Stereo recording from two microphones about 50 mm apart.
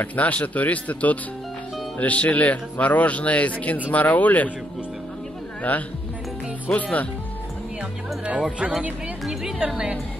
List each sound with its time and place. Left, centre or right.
0.0 s speech: left
5.6 s speech: left
9.2 s a woman's voice: centre